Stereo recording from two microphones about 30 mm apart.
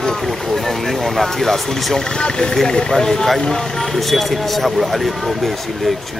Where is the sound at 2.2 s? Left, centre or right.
Left.